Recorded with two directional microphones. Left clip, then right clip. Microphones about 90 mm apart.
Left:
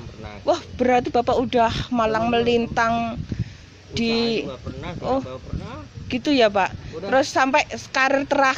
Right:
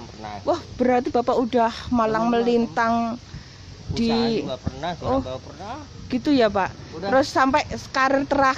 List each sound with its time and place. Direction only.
0.5 s speech: 10° right (ahead or behind)